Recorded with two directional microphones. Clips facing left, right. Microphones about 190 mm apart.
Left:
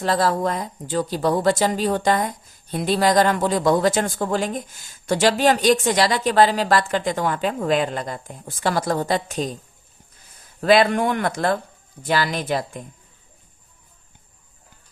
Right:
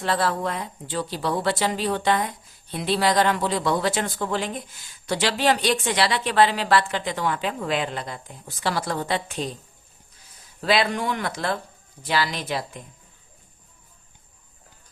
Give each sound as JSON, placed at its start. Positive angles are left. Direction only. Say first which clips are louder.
{"t": 0.0, "sound": "speech", "louder": "left 4 dB", "side_deg": 40}
{"t": 10.6, "sound": "speech", "louder": "left 6 dB", "side_deg": 50}